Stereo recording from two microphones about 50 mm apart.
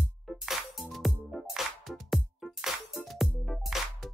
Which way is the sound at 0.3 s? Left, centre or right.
Centre.